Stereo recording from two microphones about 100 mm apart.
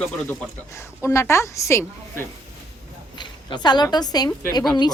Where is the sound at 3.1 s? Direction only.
45° left (ahead or behind).